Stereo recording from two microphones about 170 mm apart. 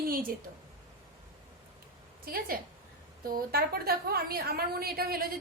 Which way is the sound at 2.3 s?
60° right (ahead or behind).